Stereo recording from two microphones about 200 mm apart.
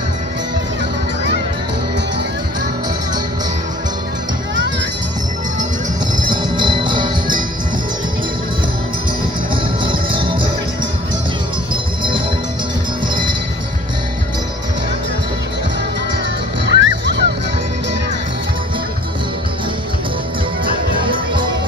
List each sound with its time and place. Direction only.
6.1 s music: 20° right (ahead or behind)
9.5 s music: 25° right (ahead or behind)
11.7 s music: 25° right (ahead or behind)
16.6 s music: 65° right (ahead or behind)
21.0 s music: 25° right (ahead or behind)